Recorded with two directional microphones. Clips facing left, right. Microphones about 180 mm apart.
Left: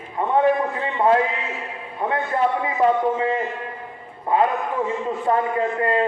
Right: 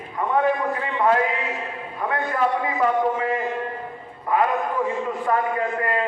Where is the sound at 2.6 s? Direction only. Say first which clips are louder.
Left 2 dB; 25° left (ahead or behind).